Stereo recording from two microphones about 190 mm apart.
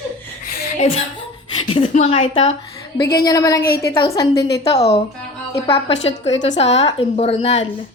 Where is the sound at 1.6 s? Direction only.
30° left (ahead or behind).